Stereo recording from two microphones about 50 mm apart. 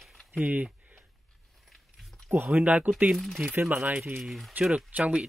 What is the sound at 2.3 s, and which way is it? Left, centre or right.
Speech, right.